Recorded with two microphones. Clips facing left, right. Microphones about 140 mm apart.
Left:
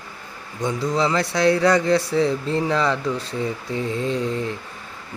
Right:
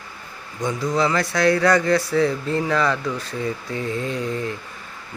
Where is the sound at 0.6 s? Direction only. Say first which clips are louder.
Even; 25° left (ahead or behind).